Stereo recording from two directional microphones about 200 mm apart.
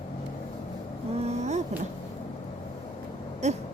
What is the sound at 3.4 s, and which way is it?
Owl, 35° right (ahead or behind).